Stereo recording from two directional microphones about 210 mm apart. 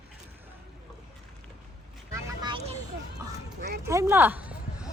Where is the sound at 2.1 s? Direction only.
20° right (ahead or behind).